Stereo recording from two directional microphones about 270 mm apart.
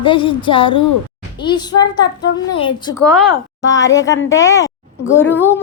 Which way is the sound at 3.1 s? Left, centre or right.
Centre.